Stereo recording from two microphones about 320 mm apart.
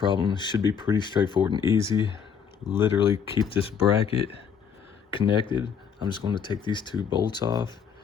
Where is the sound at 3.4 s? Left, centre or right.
Centre.